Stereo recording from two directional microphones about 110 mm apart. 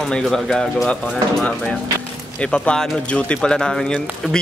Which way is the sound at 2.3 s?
10° left (ahead or behind).